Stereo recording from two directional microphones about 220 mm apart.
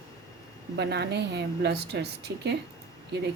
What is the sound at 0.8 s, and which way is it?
A woman's voice, 50° right (ahead or behind).